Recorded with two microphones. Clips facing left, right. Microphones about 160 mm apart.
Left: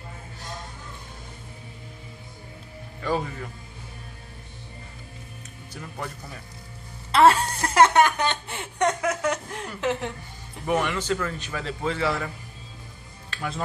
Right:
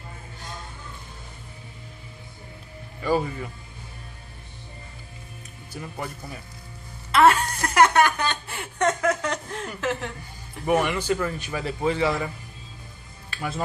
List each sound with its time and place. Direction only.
3.0 s a man's voice: 10° right (ahead or behind)
5.7 s a man's voice: 10° right (ahead or behind)
7.1 s a woman's voice: 30° left (ahead or behind)
10.7 s a man's voice: 10° right (ahead or behind)
13.3 s music: 5° right (ahead or behind)